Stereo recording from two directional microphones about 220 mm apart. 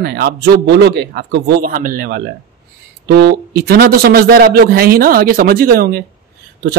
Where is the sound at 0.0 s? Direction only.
45° right (ahead or behind).